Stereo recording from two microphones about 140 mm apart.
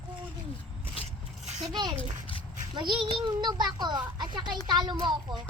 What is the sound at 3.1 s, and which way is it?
A child's voice, 35° right (ahead or behind).